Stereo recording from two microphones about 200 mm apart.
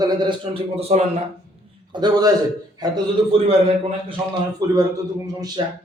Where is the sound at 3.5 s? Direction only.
30° right (ahead or behind).